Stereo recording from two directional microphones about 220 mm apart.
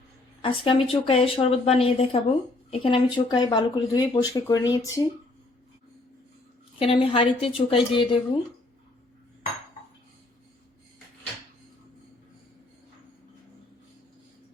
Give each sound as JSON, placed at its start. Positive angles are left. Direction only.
{"t": 0.4, "sound": "speech", "side_deg": 25}
{"t": 6.7, "sound": "speech", "side_deg": 25}